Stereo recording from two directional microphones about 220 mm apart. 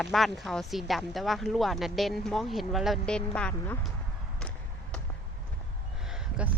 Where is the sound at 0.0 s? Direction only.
Centre (ahead or behind).